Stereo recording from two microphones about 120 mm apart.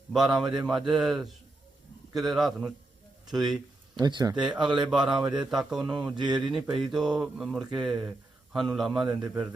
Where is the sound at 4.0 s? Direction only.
35° right (ahead or behind).